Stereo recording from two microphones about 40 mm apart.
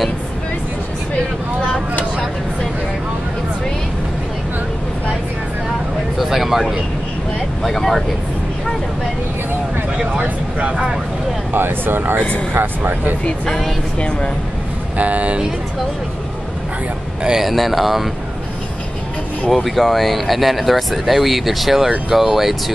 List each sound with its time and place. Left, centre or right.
6.1 s a sound: centre
7.6 s speech: centre
11.5 s speech: right
13.5 s speech: centre
13.9 s speech: left
15.0 s speech: right
17.4 s speech: centre
19.5 s speech: centre